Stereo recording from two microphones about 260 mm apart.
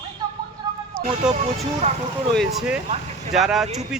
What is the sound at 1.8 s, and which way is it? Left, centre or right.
Speech, right.